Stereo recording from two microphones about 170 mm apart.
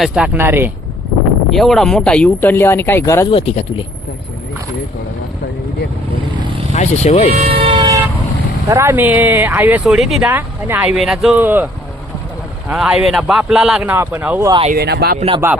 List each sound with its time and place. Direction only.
0.0 s speech: 5° right (ahead or behind)
1.5 s speech: centre (ahead or behind)
3.2 s speech: 35° left (ahead or behind)
6.7 s speech: 40° left (ahead or behind)
7.3 s vehicle: 35° right (ahead or behind)
8.7 s speech: 15° right (ahead or behind)
14.7 s speech: 70° right (ahead or behind)
15.4 s speech: 15° right (ahead or behind)